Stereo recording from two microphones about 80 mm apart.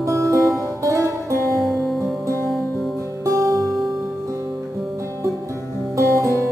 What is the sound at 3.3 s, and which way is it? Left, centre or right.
Music, right.